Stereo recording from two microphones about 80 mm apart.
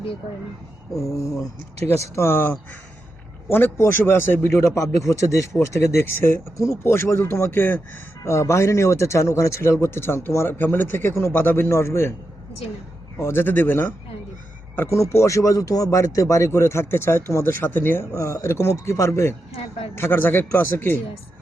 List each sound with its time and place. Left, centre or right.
0.9 s a man's voice: left
8.2 s a man's voice: left
13.1 s speech: left
14.8 s a man's voice: left
18.1 s a man's voice: left